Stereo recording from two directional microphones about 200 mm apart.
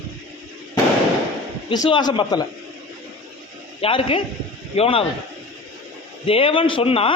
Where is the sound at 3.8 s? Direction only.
30° left (ahead or behind).